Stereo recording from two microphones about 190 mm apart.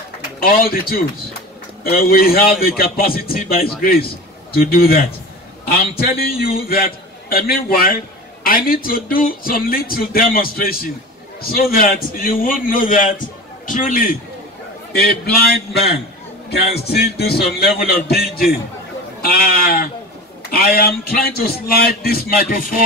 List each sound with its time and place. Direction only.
0.4 s a man's voice: 50° left (ahead or behind)
14.9 s a man's voice: 55° left (ahead or behind)
19.2 s a man's voice: 50° left (ahead or behind)